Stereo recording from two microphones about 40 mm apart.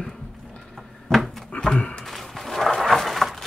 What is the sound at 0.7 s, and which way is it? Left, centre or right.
Cupboard open or close, centre.